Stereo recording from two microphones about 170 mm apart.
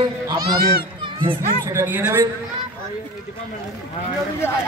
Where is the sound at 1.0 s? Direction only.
30° right (ahead or behind).